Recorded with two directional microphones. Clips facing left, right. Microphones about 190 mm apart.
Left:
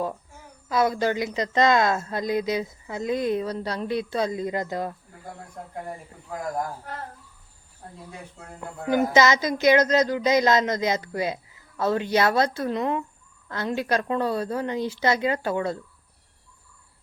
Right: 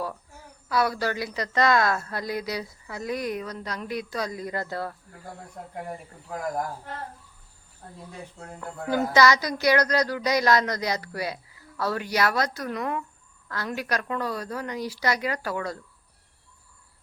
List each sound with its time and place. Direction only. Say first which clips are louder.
0.0 s speech: left 4 dB; 20° left (ahead or behind)
8.6 s speech: left 3 dB; 20° left (ahead or behind)